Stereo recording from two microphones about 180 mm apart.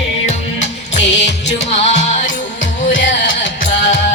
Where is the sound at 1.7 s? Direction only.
40° left (ahead or behind).